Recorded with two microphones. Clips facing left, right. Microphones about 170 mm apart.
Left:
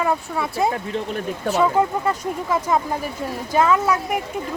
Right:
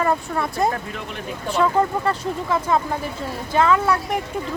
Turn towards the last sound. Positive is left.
turn(degrees=10)  # may be behind; listen again after turning